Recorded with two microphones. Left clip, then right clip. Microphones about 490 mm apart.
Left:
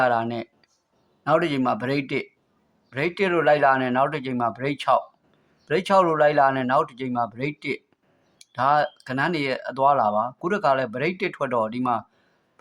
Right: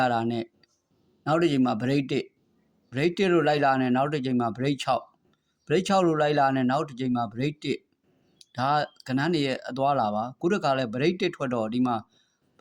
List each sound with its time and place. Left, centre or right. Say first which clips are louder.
0.0 s speech: left 4 dB; right